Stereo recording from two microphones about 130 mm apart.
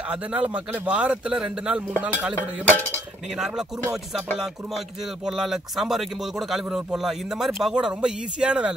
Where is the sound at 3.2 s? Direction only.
5° right (ahead or behind).